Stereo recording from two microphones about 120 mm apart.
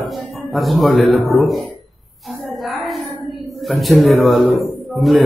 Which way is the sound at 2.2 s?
Centre (ahead or behind).